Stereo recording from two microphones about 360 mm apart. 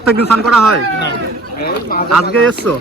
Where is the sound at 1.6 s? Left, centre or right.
Left.